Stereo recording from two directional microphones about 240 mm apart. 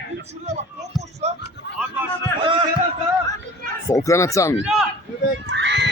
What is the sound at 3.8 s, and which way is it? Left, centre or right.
Speech, centre.